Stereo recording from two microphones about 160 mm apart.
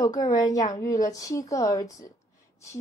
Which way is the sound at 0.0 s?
25° left (ahead or behind).